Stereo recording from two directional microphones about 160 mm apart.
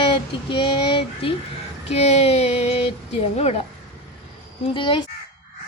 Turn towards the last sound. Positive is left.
turn(degrees=30)  # may be behind; listen again after turning